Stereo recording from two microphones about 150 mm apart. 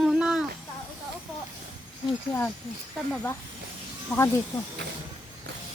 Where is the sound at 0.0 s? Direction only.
5° right (ahead or behind).